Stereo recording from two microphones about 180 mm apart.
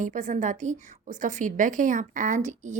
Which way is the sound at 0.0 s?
45° right (ahead or behind).